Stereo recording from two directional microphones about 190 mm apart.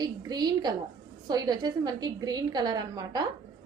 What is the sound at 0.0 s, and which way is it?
A woman's voice, 20° right (ahead or behind).